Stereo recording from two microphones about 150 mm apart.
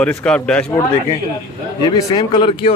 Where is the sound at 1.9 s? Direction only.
25° left (ahead or behind).